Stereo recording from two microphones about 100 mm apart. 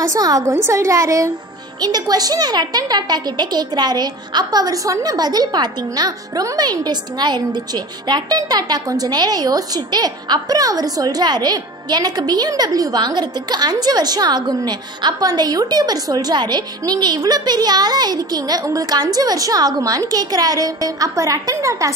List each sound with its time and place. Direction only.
0.1 s a woman's voice: 40° right (ahead or behind)
0.5 s a woman's voice: 30° right (ahead or behind)